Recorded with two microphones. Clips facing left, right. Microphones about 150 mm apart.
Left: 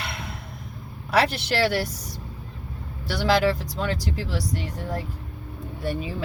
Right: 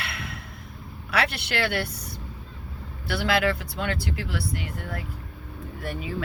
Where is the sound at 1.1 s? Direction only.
40° left (ahead or behind).